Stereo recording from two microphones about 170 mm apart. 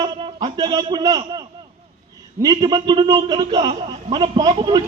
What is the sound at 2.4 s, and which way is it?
A man's voice, 20° right (ahead or behind).